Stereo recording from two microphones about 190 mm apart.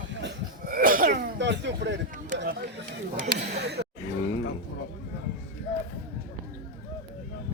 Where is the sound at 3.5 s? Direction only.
65° right (ahead or behind).